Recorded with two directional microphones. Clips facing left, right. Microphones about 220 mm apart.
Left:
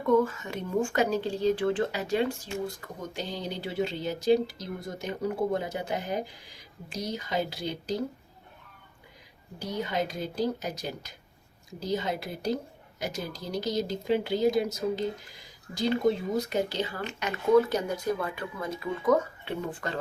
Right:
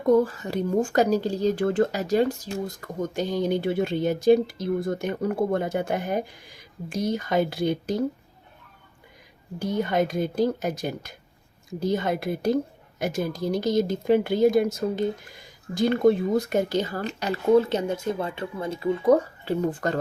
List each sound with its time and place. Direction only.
0.0 s speech: 35° right (ahead or behind); by 7.9 s 55° right (ahead or behind)
9.6 s speech: 50° right (ahead or behind)